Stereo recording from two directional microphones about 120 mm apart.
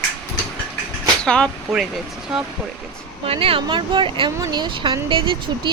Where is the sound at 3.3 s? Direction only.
50° right (ahead or behind).